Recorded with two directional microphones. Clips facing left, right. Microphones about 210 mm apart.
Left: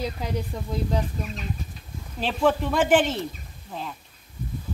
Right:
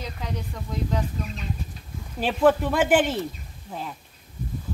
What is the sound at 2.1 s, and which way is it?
A woman's voice, 10° right (ahead or behind).